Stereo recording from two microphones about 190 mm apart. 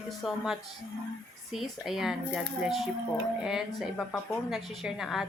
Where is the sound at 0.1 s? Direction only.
Centre (ahead or behind).